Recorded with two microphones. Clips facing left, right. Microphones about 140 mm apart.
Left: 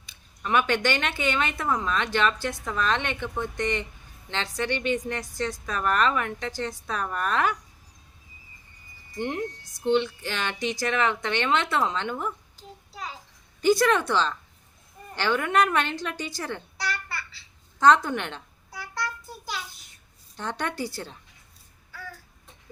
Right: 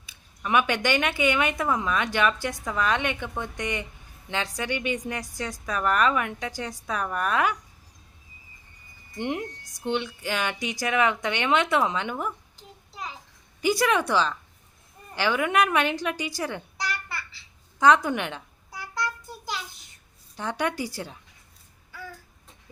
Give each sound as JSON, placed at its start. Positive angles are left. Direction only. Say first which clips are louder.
{"t": 0.0, "sound": "speech", "louder": "right 1 dB", "side_deg": -10}
{"t": 9.1, "sound": "speech", "louder": "even", "side_deg": -15}
{"t": 13.6, "sound": "speech", "louder": "left 2 dB", "side_deg": -10}
{"t": 20.3, "sound": "speech", "louder": "right 3 dB", "side_deg": -10}